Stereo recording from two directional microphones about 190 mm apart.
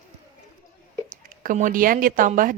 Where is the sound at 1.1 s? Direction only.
45° right (ahead or behind).